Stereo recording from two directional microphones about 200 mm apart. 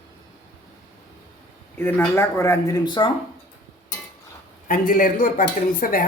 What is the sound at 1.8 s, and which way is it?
Speech, 10° left (ahead or behind).